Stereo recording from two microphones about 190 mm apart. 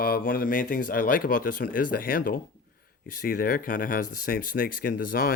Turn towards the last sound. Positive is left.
turn(degrees=50)  # may be behind; listen again after turning